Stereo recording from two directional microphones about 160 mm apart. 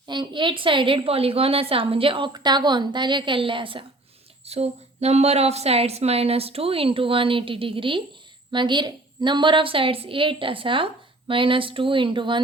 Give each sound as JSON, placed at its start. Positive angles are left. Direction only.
{"t": 0.1, "sound": "a woman's voice", "side_deg": -30}